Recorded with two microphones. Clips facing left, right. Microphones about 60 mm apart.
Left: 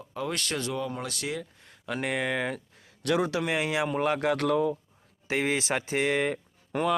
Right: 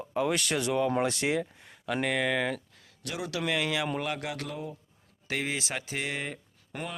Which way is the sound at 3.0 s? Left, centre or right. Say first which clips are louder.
Left 12 dB; left.